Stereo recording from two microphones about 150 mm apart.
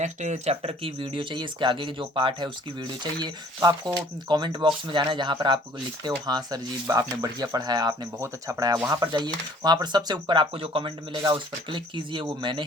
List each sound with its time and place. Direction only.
0.0 s speech: 50° right (ahead or behind); by 12.6 s 30° right (ahead or behind)